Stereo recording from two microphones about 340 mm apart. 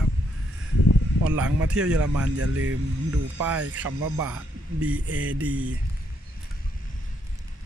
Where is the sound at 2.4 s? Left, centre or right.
Right.